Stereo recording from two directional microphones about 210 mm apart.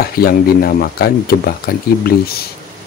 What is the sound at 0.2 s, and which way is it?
Speech, 45° left (ahead or behind).